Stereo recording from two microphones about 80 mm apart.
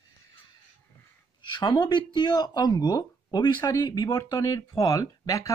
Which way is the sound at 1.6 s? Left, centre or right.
Left.